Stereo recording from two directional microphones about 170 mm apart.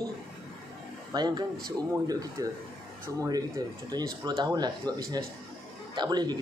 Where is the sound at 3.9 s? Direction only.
25° right (ahead or behind).